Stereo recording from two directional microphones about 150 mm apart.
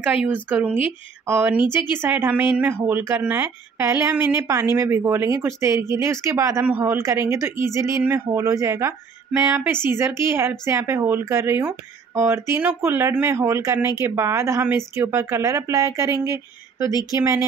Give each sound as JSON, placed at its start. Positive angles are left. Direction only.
{"t": 0.0, "sound": "speech", "side_deg": -10}